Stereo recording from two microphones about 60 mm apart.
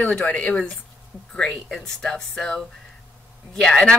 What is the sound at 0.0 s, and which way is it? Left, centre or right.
Speech, left.